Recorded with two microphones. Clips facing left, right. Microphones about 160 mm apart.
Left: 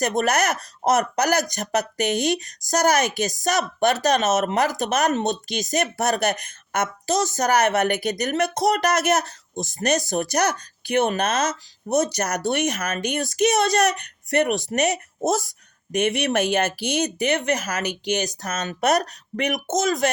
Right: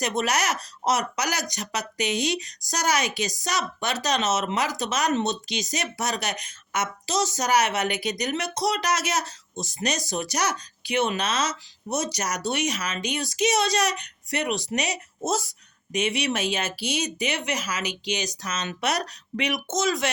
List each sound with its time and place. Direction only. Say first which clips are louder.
0.0 s speech: left 4 dB; 45° left (ahead or behind)